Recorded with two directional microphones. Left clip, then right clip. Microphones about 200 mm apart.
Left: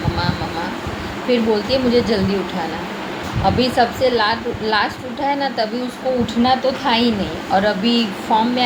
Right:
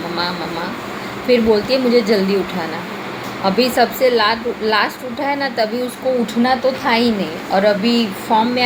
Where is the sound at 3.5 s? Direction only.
20° right (ahead or behind).